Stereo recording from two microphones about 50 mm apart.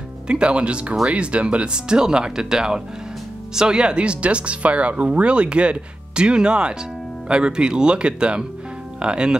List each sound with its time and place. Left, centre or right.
0.3 s speech: right